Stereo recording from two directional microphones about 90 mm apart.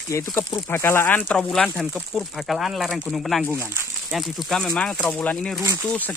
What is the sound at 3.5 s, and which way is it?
Speech, 25° right (ahead or behind).